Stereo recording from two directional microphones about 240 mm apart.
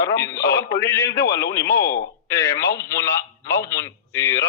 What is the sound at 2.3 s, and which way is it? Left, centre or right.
Speech, centre.